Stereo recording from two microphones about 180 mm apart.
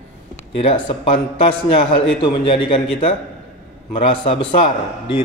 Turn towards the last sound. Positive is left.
turn(degrees=30)  # may be behind; listen again after turning